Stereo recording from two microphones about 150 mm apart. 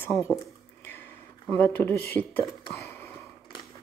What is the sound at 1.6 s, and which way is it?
Speech, 15° left (ahead or behind).